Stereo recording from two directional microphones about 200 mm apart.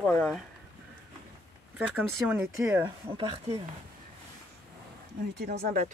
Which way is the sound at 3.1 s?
25° right (ahead or behind).